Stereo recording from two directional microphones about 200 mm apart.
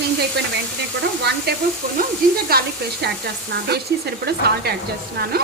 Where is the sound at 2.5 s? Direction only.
50° right (ahead or behind).